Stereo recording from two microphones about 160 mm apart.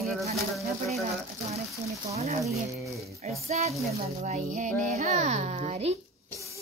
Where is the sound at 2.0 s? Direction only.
40° right (ahead or behind).